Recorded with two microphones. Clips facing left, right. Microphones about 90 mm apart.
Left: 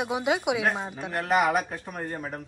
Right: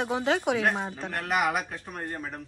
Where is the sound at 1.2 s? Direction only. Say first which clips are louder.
Left 4 dB; centre (ahead or behind).